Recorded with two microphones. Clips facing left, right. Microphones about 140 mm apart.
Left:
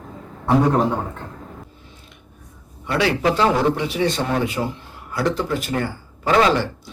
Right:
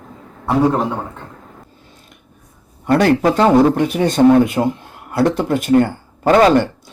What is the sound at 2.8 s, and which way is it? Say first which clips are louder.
A man's voice: right 6 dB; 45° right (ahead or behind).